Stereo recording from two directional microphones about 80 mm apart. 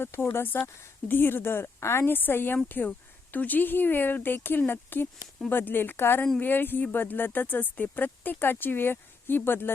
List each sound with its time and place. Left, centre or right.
0.0 s speech: left